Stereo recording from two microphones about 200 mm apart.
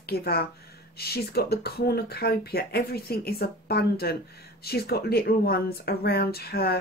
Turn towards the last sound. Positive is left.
turn(degrees=50)  # may be behind; listen again after turning